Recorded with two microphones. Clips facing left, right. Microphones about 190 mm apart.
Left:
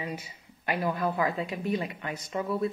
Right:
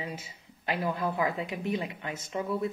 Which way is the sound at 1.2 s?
20° right (ahead or behind).